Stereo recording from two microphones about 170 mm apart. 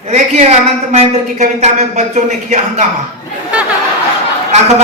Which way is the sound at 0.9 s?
40° right (ahead or behind).